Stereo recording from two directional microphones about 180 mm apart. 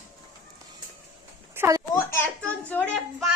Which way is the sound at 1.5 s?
15° right (ahead or behind).